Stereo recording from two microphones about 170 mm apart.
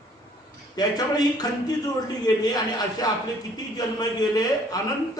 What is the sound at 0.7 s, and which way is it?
A man's voice, 20° left (ahead or behind).